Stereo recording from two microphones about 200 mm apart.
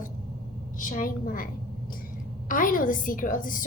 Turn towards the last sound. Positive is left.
turn(degrees=40)  # may be behind; listen again after turning